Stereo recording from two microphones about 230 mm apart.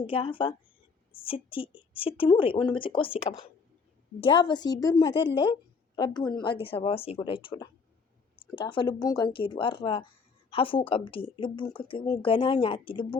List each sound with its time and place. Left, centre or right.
0.1 s speech: left